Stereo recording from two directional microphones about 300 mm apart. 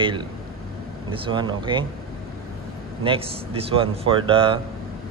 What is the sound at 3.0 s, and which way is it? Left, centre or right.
A man's voice, centre.